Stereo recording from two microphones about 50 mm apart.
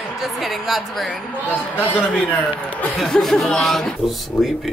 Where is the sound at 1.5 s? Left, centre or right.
Left.